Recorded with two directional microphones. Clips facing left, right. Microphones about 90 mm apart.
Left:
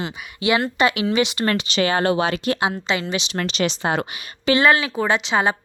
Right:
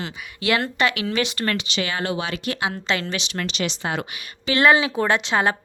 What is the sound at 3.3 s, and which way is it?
Speech, 40° left (ahead or behind).